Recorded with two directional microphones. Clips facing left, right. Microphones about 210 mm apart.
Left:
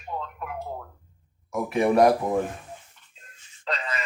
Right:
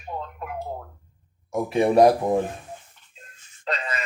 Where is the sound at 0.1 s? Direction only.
30° right (ahead or behind).